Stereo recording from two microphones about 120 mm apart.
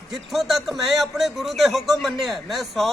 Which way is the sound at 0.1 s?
Centre (ahead or behind).